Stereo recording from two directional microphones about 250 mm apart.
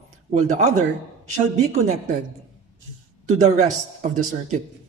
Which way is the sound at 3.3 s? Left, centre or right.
Right.